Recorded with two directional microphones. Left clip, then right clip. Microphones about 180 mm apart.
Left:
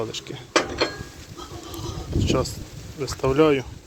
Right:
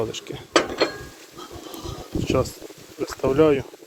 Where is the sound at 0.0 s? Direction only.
20° right (ahead or behind).